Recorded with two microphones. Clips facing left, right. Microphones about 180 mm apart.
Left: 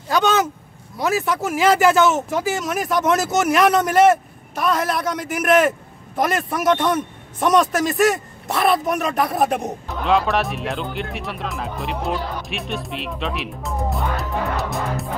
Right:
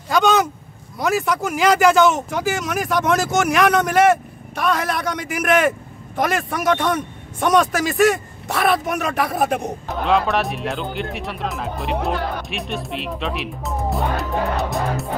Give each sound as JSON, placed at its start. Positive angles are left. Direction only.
{"t": 0.1, "sound": "speech", "side_deg": 0}